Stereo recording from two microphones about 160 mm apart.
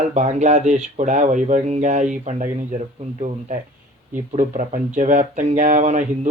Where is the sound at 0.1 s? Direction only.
45° right (ahead or behind).